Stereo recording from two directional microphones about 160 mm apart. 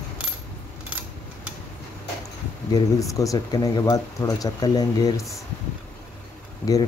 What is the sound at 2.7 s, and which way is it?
Speech, 20° left (ahead or behind).